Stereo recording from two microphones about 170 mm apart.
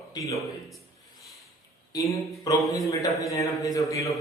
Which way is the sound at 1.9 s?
20° left (ahead or behind).